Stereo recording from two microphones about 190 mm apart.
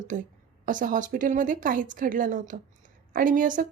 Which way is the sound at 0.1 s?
40° right (ahead or behind).